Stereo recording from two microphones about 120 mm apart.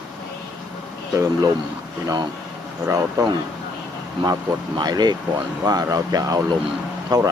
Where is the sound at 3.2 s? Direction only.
30° right (ahead or behind).